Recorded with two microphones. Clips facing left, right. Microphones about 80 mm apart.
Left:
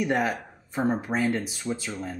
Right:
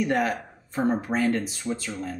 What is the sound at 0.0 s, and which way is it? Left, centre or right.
Speech, centre.